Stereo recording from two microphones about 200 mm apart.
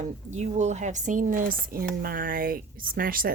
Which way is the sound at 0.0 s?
35° right (ahead or behind).